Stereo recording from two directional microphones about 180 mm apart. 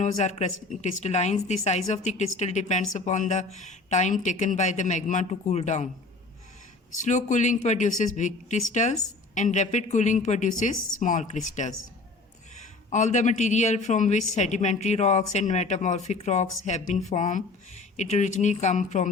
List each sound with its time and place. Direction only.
0.0 s a woman's voice: 40° left (ahead or behind)
7.0 s a woman's voice: 40° left (ahead or behind)